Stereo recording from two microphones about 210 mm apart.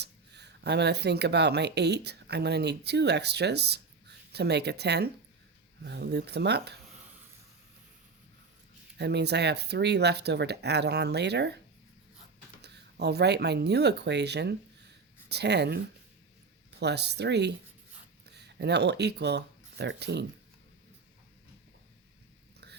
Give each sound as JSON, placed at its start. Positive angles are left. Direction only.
{"t": 0.0, "sound": "speech", "side_deg": -55}
{"t": 9.0, "sound": "speech", "side_deg": -55}
{"t": 12.6, "sound": "speech", "side_deg": -50}
{"t": 16.8, "sound": "speech", "side_deg": -50}